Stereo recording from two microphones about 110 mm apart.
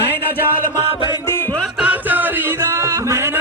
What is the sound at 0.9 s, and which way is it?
Music, 50° left (ahead or behind).